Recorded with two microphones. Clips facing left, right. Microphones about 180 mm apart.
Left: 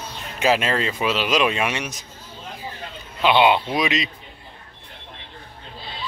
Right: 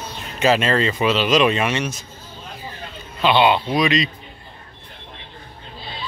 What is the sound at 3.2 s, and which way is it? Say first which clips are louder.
Speech: even; 15° left (ahead or behind).